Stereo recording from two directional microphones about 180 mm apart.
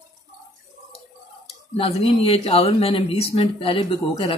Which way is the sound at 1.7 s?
35° left (ahead or behind).